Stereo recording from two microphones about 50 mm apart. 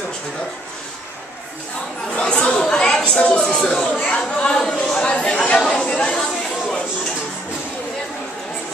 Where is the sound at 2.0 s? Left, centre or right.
Centre.